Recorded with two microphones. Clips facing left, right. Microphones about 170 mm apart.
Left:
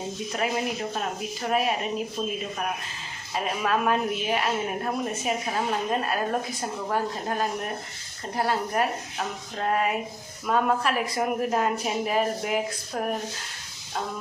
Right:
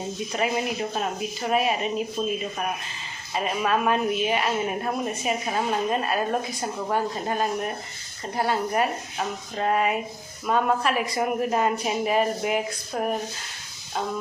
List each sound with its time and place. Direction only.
0.3 s speech: 5° right (ahead or behind)
3.3 s speech: centre (ahead or behind)